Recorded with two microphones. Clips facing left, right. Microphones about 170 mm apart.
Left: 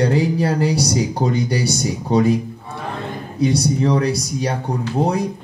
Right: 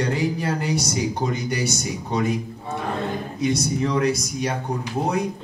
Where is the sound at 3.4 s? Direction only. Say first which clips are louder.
Left 6 dB; 35° left (ahead or behind).